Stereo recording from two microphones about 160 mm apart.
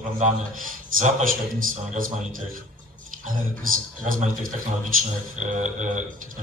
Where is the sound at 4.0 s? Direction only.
55° right (ahead or behind).